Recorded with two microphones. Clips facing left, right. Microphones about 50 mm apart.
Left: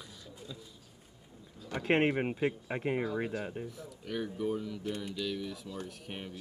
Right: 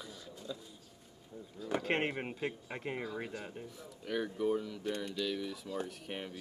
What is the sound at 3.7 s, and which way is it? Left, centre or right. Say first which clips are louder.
Speech: even; centre.